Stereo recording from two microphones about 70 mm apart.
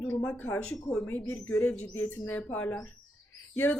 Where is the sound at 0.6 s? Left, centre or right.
Centre.